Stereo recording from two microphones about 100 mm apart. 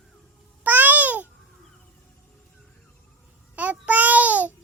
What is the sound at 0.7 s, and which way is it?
Babbling, 15° right (ahead or behind).